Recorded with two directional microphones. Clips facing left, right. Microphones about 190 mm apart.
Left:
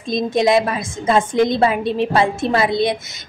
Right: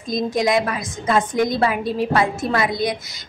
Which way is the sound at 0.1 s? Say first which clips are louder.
Left 3 dB; 25° left (ahead or behind).